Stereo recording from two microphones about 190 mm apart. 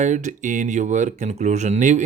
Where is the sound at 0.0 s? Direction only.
40° right (ahead or behind).